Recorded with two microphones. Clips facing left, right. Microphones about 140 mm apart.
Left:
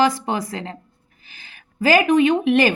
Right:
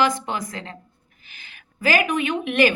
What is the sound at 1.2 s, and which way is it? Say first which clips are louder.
Speech: left 1 dB; 35° left (ahead or behind).